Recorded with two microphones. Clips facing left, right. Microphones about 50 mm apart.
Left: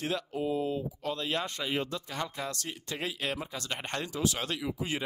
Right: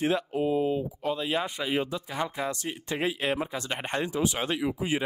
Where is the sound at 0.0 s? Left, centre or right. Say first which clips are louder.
Right 6 dB; right.